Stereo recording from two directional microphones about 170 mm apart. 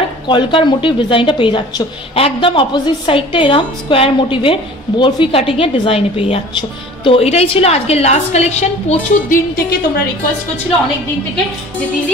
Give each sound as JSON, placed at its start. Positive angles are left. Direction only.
{"t": 0.3, "sound": "a woman's voice", "side_deg": 30}